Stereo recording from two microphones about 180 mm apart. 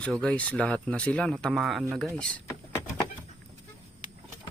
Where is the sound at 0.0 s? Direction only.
5° left (ahead or behind).